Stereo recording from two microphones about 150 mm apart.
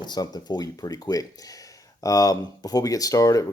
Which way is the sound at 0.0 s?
25° left (ahead or behind).